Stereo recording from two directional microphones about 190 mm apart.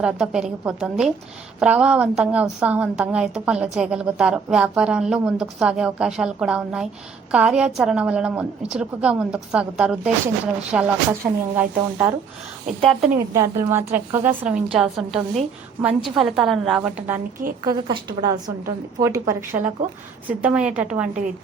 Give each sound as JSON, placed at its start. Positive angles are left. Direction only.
{"t": 0.0, "sound": "a woman's voice", "side_deg": -5}
{"t": 12.8, "sound": "a woman's voice", "side_deg": 0}
{"t": 13.3, "sound": "a woman's voice", "side_deg": -15}
{"t": 17.6, "sound": "a woman's voice", "side_deg": -20}